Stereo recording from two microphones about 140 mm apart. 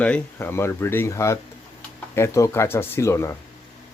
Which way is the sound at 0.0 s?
10° left (ahead or behind).